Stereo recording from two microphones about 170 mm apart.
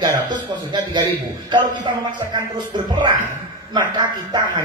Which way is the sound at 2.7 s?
25° right (ahead or behind).